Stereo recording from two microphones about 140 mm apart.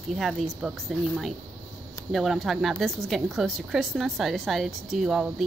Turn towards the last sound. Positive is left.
turn(degrees=-5)  # may be behind; listen again after turning